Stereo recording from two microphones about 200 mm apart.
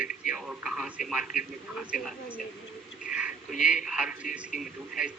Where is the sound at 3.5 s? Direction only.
40° left (ahead or behind).